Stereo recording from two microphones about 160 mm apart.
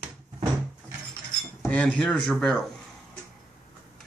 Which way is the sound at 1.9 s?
5° left (ahead or behind).